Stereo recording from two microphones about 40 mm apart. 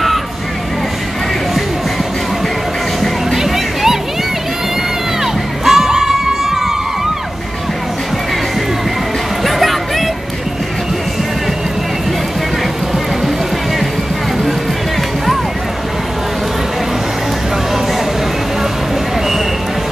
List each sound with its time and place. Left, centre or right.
3.3 s music: centre
5.2 s crowd: centre
9.4 s music: centre